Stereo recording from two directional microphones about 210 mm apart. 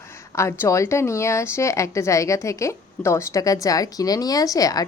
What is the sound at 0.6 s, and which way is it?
Speech, 15° left (ahead or behind).